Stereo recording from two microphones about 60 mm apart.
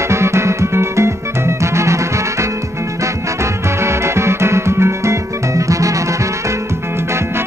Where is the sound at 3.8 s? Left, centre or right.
Right.